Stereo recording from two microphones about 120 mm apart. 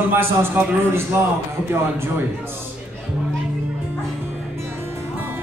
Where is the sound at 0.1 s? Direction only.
20° right (ahead or behind).